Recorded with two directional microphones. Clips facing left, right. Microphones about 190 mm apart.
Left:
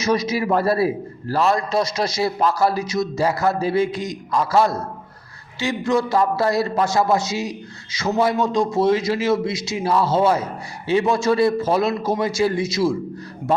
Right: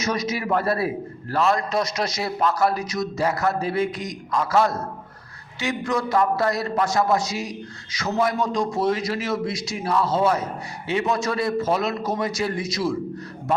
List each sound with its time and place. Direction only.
0.0 s a man's voice: 30° left (ahead or behind)